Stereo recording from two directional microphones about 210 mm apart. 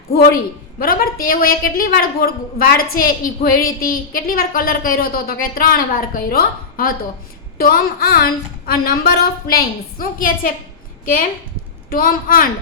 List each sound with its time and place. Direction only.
0.1 s a woman's voice: 45° left (ahead or behind)